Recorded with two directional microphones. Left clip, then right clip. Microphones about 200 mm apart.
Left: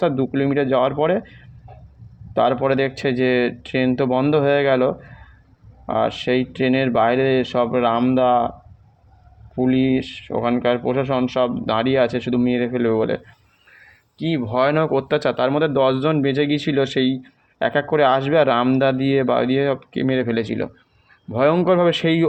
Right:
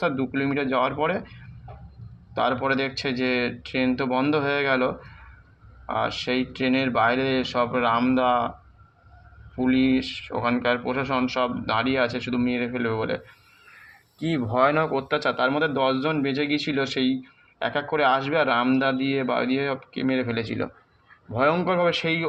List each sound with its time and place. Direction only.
0.0 s speech: 55° left (ahead or behind)
2.3 s speech: 55° left (ahead or behind)
9.6 s speech: 55° left (ahead or behind)
14.2 s speech: 25° left (ahead or behind); by 22.3 s 55° left (ahead or behind)